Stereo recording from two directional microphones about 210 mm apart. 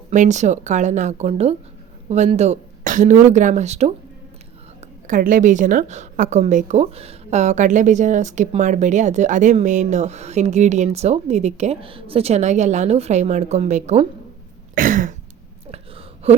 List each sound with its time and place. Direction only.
0.1 s a woman's voice: 35° right (ahead or behind)
14.8 s cough: 40° right (ahead or behind)
15.7 s a sound: 30° right (ahead or behind)